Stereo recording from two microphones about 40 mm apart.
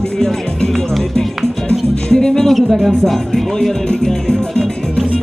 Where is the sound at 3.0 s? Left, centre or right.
Centre.